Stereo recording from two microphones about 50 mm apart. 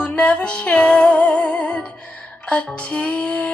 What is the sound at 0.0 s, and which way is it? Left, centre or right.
Music, left.